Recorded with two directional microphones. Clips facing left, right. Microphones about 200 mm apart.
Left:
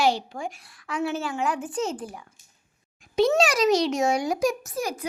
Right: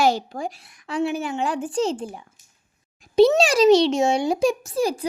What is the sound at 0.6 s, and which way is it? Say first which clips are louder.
Speech: right 1 dB; 20° right (ahead or behind).